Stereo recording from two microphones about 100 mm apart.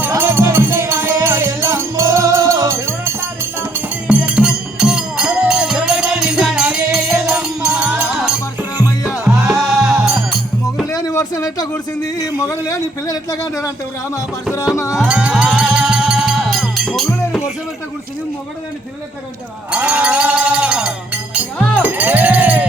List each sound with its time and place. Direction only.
0.2 s music: 25° right (ahead or behind)
4.0 s music: 10° right (ahead or behind)
9.5 s music: 5° right (ahead or behind)
10.8 s a sound: 35° left (ahead or behind)
14.9 s music: 10° right (ahead or behind)
19.7 s music: 15° right (ahead or behind)